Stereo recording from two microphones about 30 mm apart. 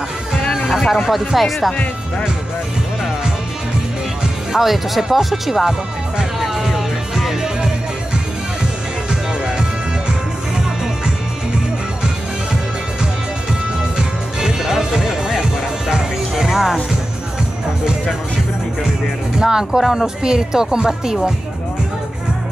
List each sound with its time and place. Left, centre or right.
0.6 s speech: centre
1.0 s speech: centre
4.5 s speech: centre
6.4 s music: centre
13.9 s music: centre
19.4 s speech: right